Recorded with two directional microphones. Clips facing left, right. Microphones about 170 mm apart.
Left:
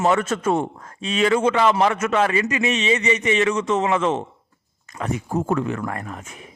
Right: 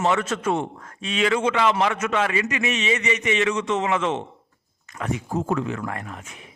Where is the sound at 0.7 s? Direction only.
30° left (ahead or behind).